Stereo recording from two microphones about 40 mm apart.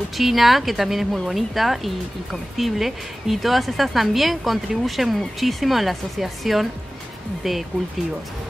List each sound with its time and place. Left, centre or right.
0.2 s a woman's voice: centre